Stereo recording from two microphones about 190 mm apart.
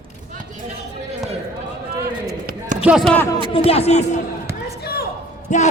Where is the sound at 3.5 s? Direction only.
30° left (ahead or behind).